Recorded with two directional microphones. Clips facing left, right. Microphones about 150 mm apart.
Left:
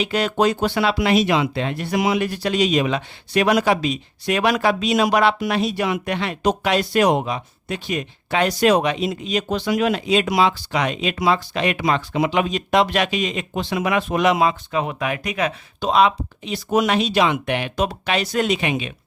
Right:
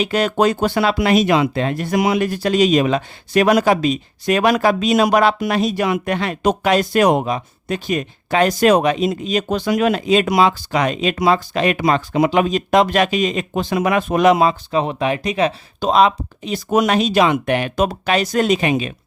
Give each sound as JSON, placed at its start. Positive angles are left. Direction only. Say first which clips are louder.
{"t": 0.0, "sound": "speech", "louder": "right 3 dB", "side_deg": -45}